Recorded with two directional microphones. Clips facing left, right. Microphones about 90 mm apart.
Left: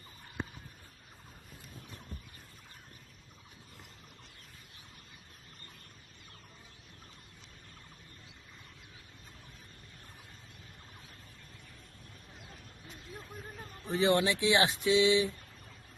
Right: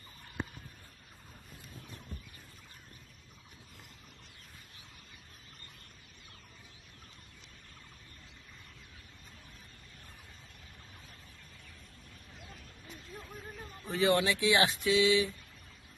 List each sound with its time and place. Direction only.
13.9 s speech: 25° left (ahead or behind)